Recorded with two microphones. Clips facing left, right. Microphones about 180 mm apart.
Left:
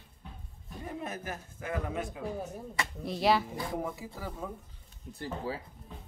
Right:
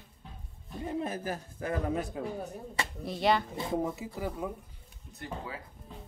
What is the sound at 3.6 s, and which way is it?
Speech, 20° right (ahead or behind).